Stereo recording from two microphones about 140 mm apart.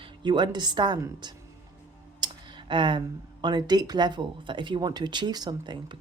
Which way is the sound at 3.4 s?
30° right (ahead or behind).